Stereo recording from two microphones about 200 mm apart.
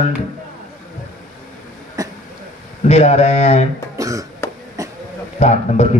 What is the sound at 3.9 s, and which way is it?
Music, 15° right (ahead or behind).